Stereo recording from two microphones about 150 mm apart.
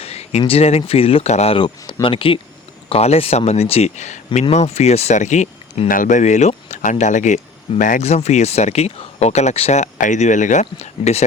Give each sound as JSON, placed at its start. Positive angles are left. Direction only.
{"t": 0.0, "sound": "speech", "side_deg": 45}
{"t": 5.9, "sound": "speech", "side_deg": 60}